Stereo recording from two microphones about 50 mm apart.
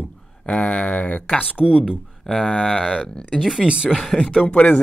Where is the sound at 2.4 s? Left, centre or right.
Left.